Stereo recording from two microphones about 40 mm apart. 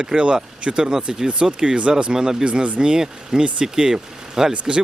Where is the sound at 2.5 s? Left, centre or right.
Right.